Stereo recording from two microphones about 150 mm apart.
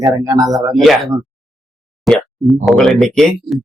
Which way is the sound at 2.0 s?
Centre (ahead or behind).